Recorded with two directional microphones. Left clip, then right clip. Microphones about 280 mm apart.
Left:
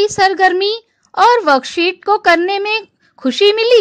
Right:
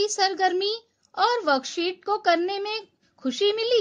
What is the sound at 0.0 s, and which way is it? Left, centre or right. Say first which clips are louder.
A woman's voice: left 11 dB; left.